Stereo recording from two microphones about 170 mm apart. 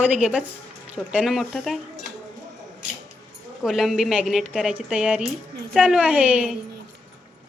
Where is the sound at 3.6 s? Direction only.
Centre (ahead or behind).